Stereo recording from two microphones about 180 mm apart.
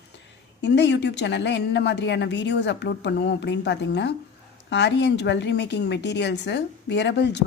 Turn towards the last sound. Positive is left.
turn(degrees=70)  # may be behind; listen again after turning